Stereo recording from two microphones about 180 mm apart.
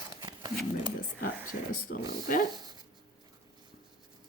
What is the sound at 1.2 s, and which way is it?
Speech, 55° left (ahead or behind).